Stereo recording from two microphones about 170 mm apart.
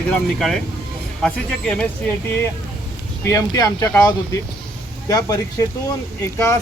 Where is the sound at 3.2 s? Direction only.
20° left (ahead or behind).